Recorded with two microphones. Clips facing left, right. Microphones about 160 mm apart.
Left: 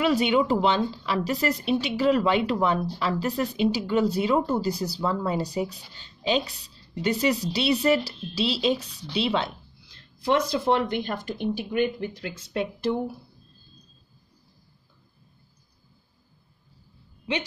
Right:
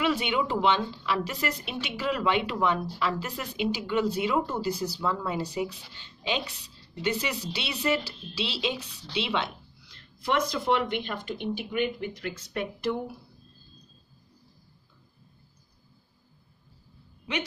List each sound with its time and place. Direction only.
0.0 s a woman's voice: 40° left (ahead or behind)